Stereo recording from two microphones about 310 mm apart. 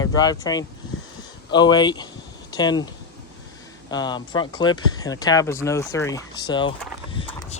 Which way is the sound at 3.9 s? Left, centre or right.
Centre.